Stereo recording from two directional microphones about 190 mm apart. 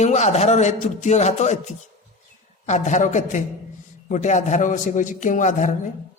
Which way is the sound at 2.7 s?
40° left (ahead or behind).